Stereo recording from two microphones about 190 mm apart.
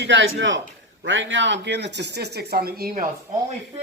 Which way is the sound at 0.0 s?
75° right (ahead or behind).